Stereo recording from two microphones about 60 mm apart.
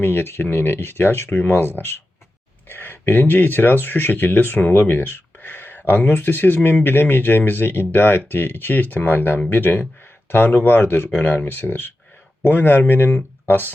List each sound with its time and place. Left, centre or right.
0.0 s speech: left